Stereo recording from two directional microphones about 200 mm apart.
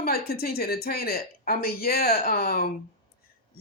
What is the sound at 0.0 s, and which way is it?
Speech, 50° left (ahead or behind).